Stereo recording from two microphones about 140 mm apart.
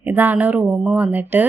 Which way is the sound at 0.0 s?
15° right (ahead or behind).